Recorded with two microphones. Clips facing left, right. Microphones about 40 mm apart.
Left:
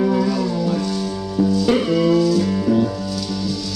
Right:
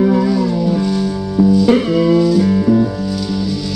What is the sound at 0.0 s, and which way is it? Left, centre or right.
Music, right.